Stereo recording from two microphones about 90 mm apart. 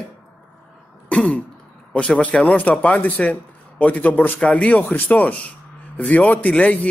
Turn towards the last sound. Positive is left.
turn(degrees=15)  # may be behind; listen again after turning